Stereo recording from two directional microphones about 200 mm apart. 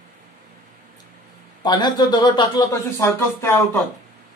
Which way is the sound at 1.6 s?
20° left (ahead or behind).